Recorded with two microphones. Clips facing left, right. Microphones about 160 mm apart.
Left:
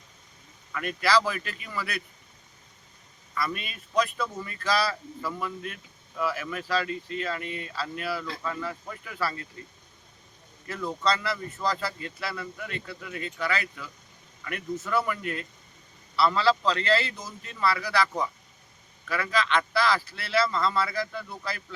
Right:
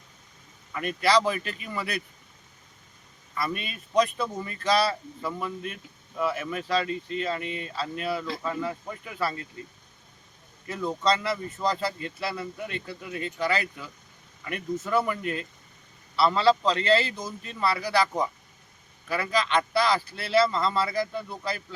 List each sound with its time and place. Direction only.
1.0 s speech: 25° right (ahead or behind)
3.3 s speech: 25° right (ahead or behind)
10.7 s a man's voice: 25° right (ahead or behind)